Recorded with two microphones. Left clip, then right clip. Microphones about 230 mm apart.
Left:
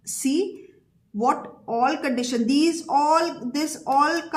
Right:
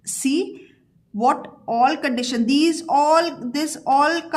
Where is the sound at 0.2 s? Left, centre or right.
Right.